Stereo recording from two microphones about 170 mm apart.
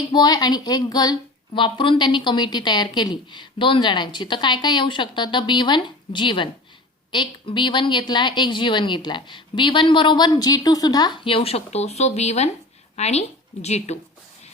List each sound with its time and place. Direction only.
0.1 s a woman's voice: 25° left (ahead or behind); by 14.0 s 40° left (ahead or behind)